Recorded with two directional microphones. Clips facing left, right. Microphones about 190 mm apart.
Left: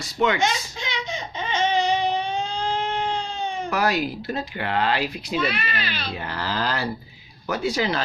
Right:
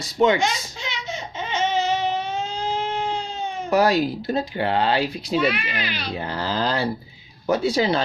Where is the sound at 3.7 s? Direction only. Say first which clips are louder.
Right 6 dB; 35° right (ahead or behind).